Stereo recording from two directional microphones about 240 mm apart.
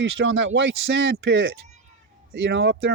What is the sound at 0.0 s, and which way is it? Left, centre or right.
Speech, right.